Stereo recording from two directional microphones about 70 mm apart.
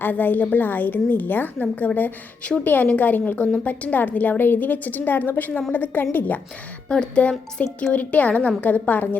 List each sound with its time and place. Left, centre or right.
0.0 s a woman's voice: left
6.8 s a woman's voice: centre